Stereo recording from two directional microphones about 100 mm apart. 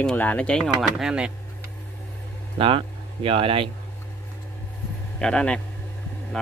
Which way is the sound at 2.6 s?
65° right (ahead or behind).